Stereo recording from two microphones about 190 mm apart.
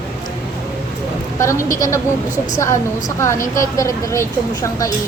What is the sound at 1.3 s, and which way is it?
Speech, 15° left (ahead or behind).